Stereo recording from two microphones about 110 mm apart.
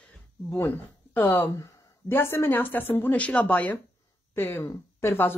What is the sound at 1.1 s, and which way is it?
A woman's voice, 15° left (ahead or behind).